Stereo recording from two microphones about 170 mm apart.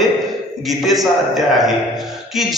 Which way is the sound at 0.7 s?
Centre (ahead or behind).